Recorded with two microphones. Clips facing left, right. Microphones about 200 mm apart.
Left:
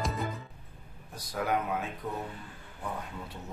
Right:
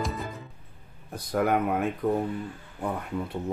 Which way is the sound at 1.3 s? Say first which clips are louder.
Right 8 dB; 60° right (ahead or behind).